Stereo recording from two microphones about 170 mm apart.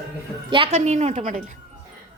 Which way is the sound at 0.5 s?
35° right (ahead or behind).